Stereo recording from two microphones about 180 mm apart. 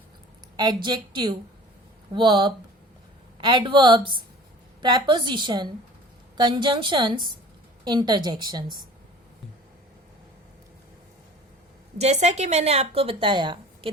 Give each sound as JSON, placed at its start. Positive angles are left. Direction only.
{"t": 0.5, "sound": "a woman's voice", "side_deg": -25}
{"t": 11.9, "sound": "speech", "side_deg": -35}